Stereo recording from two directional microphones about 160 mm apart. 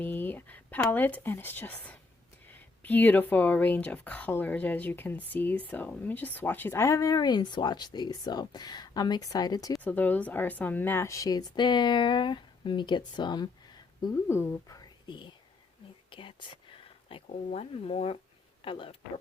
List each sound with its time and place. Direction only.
0.0 s a woman's voice: 10° left (ahead or behind)
9.7 s a woman's voice: 10° left (ahead or behind)
15.0 s speech: 30° left (ahead or behind)
16.0 s whispering: 30° left (ahead or behind)
17.1 s speech: 35° left (ahead or behind)